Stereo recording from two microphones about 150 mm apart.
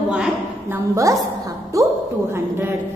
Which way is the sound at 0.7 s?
20° right (ahead or behind).